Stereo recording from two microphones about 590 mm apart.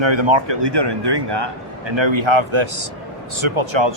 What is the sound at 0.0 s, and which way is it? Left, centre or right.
Speech, right.